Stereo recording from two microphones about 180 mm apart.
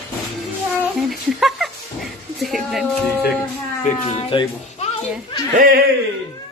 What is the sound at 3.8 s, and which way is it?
Speech, 30° left (ahead or behind).